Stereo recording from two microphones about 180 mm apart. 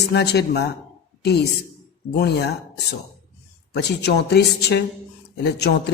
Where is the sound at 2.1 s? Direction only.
70° left (ahead or behind).